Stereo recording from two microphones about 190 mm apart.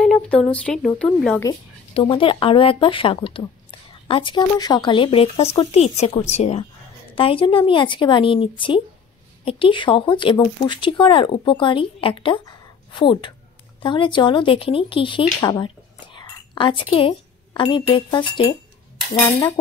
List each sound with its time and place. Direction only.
0.0 s speech: 5° left (ahead or behind)
2.0 s speech: 25° left (ahead or behind)